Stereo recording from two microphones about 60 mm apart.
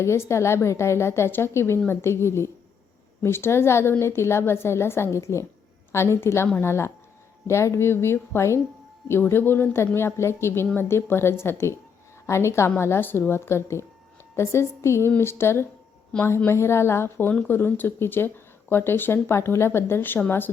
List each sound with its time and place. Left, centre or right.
0.0 s a woman's voice: left
9.3 s a woman's voice: left
17.5 s speech: left